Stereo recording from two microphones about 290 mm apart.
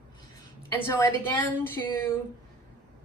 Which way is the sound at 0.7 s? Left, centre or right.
Centre.